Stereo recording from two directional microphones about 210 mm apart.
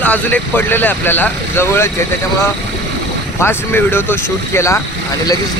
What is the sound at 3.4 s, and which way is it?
Speech, 10° left (ahead or behind).